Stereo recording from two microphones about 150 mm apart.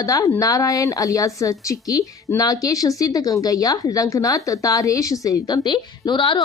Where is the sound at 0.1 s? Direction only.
25° left (ahead or behind).